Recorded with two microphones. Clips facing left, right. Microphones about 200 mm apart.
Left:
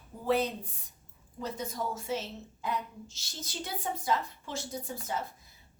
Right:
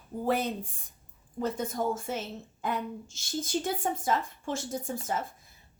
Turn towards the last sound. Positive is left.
turn(degrees=-50)  # may be behind; listen again after turning